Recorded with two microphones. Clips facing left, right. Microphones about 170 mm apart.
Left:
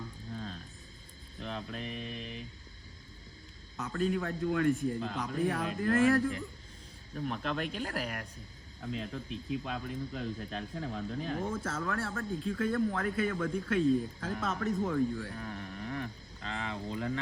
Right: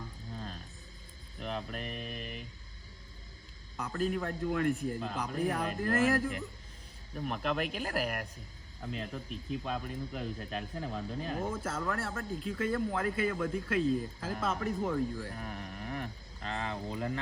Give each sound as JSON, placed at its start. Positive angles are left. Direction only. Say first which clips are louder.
{"t": 0.3, "sound": "music", "louder": "left 2 dB", "side_deg": -5}
{"t": 1.6, "sound": "speech", "louder": "left 1 dB", "side_deg": -5}
{"t": 3.8, "sound": "speech", "louder": "left 1 dB", "side_deg": 0}
{"t": 15.3, "sound": "speech", "louder": "left 1 dB", "side_deg": -20}
{"t": 15.5, "sound": "a sound", "louder": "left 1 dB", "side_deg": -5}
{"t": 16.5, "sound": "a sound", "louder": "right 1 dB", "side_deg": -35}